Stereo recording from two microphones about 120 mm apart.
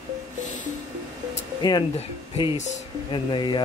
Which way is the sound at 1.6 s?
35° left (ahead or behind).